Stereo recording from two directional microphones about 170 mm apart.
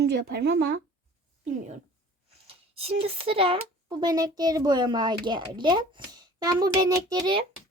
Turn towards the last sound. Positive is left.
turn(degrees=-25)  # may be behind; listen again after turning